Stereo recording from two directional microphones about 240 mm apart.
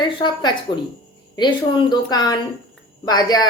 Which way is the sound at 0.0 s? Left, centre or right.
Centre.